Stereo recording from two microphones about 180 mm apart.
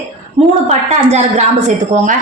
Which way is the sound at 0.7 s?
40° right (ahead or behind).